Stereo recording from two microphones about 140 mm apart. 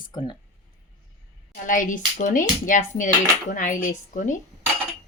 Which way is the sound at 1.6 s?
70° left (ahead or behind).